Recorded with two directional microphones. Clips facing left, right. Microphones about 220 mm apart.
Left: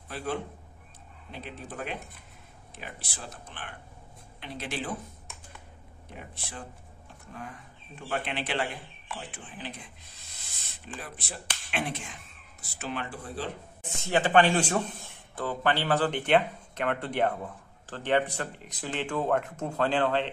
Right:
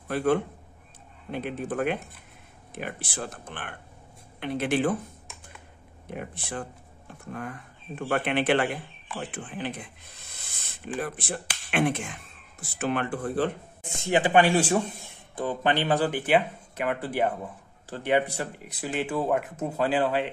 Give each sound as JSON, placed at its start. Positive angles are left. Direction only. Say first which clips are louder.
{"t": 0.1, "sound": "speech", "louder": "right 9 dB", "side_deg": -55}
{"t": 6.1, "sound": "speech", "louder": "right 8 dB", "side_deg": -55}
{"t": 11.0, "sound": "speech", "louder": "right 10 dB", "side_deg": -50}
{"t": 13.9, "sound": "speech", "louder": "right 2 dB", "side_deg": -15}